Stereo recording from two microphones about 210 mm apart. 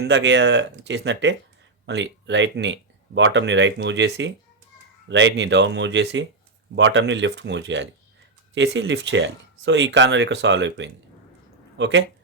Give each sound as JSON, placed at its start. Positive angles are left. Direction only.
{"t": 0.0, "sound": "speech", "side_deg": -60}